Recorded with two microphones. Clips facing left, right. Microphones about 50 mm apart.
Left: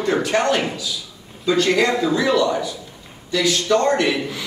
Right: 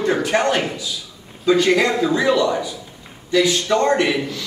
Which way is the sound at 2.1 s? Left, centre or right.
Right.